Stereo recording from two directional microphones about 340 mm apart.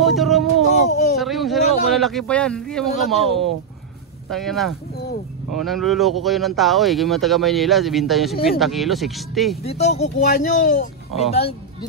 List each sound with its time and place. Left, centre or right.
0.0 s speech: centre
9.6 s speech: centre